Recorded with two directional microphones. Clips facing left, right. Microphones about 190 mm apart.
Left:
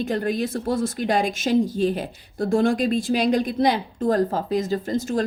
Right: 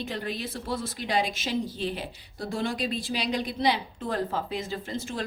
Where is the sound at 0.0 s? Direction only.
45° left (ahead or behind).